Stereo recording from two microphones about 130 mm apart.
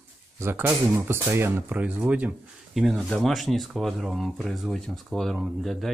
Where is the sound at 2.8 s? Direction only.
Centre (ahead or behind).